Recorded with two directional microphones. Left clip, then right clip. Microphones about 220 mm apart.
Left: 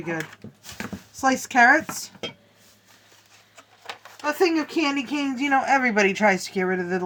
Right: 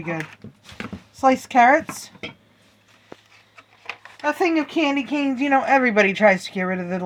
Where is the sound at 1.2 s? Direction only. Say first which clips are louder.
Right 3 dB; 45° right (ahead or behind).